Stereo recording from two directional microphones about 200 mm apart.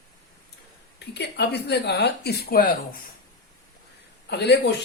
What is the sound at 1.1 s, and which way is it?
Speech, 55° left (ahead or behind).